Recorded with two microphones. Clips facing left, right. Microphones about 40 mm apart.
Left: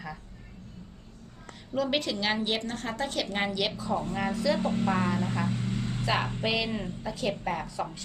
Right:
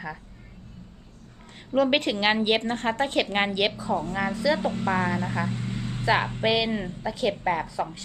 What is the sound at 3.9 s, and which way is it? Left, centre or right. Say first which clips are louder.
Speech: right 3 dB; centre.